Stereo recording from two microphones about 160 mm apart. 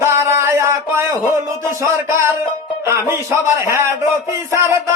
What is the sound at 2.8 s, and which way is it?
Music, 15° right (ahead or behind).